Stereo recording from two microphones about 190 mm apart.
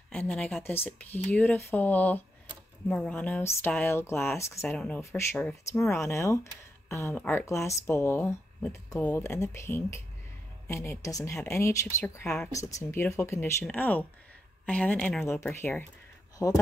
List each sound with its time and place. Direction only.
0.1 s speech: 5° left (ahead or behind)